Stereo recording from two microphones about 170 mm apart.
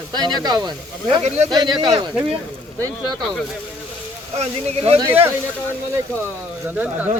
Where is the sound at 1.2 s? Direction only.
40° right (ahead or behind).